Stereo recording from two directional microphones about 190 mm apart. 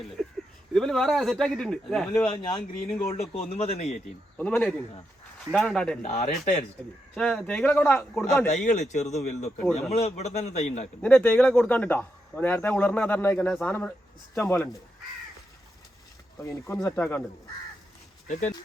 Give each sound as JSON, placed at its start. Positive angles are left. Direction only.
{"t": 0.2, "sound": "a sound", "side_deg": 0}
{"t": 0.7, "sound": "speech", "side_deg": 5}
{"t": 3.0, "sound": "speech", "side_deg": 30}
{"t": 4.4, "sound": "speech", "side_deg": 10}
{"t": 6.0, "sound": "speech", "side_deg": 35}
{"t": 7.1, "sound": "speech", "side_deg": 5}
{"t": 8.4, "sound": "speech", "side_deg": 40}
{"t": 11.0, "sound": "speech", "side_deg": 10}
{"t": 16.7, "sound": "speech", "side_deg": 5}
{"t": 18.3, "sound": "speech", "side_deg": 40}